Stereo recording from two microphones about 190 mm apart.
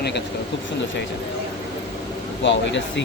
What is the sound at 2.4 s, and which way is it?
Speech, 70° left (ahead or behind).